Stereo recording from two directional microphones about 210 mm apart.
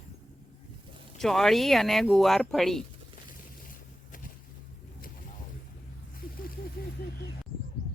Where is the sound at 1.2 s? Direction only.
Centre (ahead or behind).